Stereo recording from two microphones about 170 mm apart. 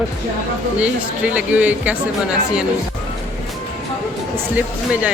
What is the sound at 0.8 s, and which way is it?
Speech, 5° right (ahead or behind).